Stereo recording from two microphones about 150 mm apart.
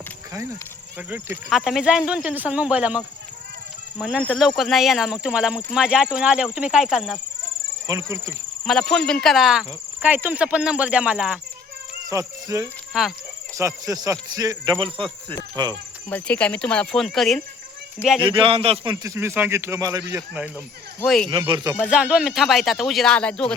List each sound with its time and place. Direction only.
0.9 s speech: 10° right (ahead or behind)
4.2 s speech: 5° left (ahead or behind)
7.9 s speech: 20° right (ahead or behind)
8.6 s speech: 5° left (ahead or behind)
12.0 s speech: 25° right (ahead or behind)
12.9 s speech: centre (ahead or behind)
13.6 s speech: 20° right (ahead or behind)
16.0 s speech: 10° left (ahead or behind)
18.3 s a man's voice: 35° right (ahead or behind)
19.0 s speech: 20° right (ahead or behind)
21.0 s speech: 5° left (ahead or behind)
21.2 s a man's voice: 30° right (ahead or behind)
21.8 s speech: 5° right (ahead or behind)